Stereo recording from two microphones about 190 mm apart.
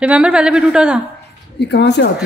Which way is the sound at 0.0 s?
5° right (ahead or behind).